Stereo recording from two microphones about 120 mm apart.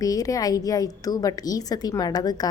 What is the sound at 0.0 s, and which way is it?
A woman's voice, 30° left (ahead or behind).